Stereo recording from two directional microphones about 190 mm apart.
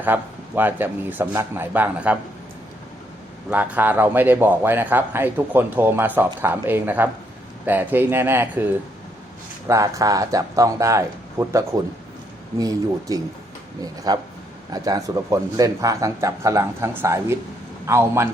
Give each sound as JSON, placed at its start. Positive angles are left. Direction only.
{"t": 0.0, "sound": "a man's voice", "side_deg": -10}
{"t": 3.5, "sound": "a man's voice", "side_deg": -10}